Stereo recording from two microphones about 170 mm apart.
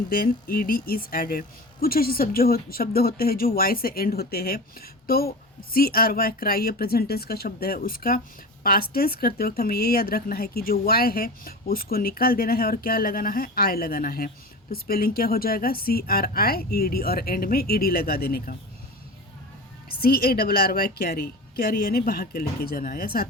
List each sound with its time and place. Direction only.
0.1 s speech: 60° left (ahead or behind)
20.0 s speech: 65° left (ahead or behind)